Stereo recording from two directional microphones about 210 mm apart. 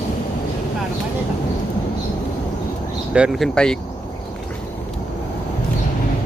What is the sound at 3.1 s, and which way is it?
Speech, 5° right (ahead or behind).